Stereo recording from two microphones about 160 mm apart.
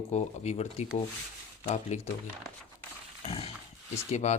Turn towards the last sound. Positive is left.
turn(degrees=45)  # may be behind; listen again after turning